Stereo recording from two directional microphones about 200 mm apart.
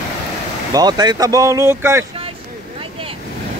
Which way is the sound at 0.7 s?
20° right (ahead or behind).